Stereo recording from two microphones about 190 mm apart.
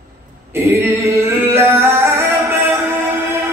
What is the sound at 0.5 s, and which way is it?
Singing, 10° right (ahead or behind).